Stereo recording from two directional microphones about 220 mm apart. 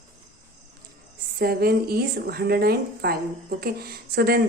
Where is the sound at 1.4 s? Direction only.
45° right (ahead or behind).